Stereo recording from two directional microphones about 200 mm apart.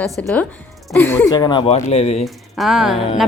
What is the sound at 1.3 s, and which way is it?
Speech, 20° left (ahead or behind).